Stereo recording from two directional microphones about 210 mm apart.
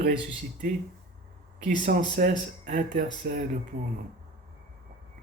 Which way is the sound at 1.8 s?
45° right (ahead or behind).